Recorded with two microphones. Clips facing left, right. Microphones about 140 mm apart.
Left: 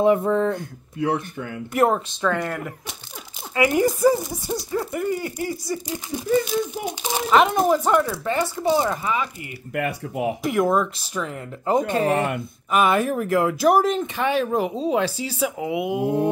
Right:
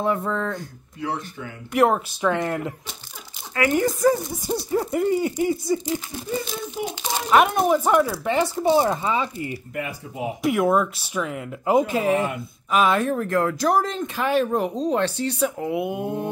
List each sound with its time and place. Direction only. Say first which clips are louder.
0.0 s speech: left 6 dB; 15° left (ahead or behind)
0.6 s speech: left 5 dB; 55° left (ahead or behind)
1.7 s speech: right 1 dB; 5° right (ahead or behind)
2.3 s owl: right 2 dB; 20° right (ahead or behind)
3.5 s speech: left 2 dB; 10° left (ahead or behind)
4.6 s owl: right 4 dB; 25° right (ahead or behind)
7.2 s speech: even; 5° right (ahead or behind)
8.4 s owl: right 2 dB; 25° right (ahead or behind)
9.8 s speech: left 6 dB; 65° left (ahead or behind)
10.4 s speech: right 2 dB; 5° right (ahead or behind)